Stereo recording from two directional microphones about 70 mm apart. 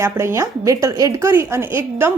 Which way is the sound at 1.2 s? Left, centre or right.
Right.